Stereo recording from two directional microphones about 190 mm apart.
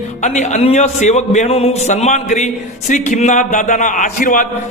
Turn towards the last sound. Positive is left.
turn(degrees=45)  # may be behind; listen again after turning